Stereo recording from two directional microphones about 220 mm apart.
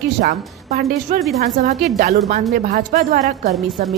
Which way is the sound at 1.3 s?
30° right (ahead or behind).